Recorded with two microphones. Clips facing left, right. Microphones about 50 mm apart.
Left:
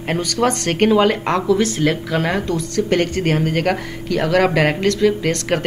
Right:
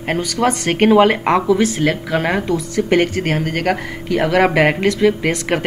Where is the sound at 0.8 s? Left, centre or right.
Right.